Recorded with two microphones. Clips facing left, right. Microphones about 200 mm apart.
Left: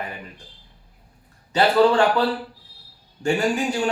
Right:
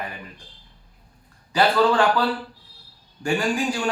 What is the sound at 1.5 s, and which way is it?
A man's voice, 25° left (ahead or behind).